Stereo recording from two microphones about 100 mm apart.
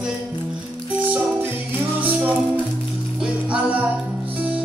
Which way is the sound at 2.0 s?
15° right (ahead or behind).